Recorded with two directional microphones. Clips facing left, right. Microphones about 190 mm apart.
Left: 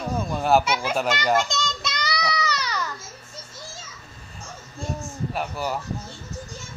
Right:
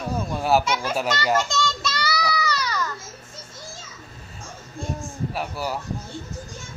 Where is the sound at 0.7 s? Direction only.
10° left (ahead or behind).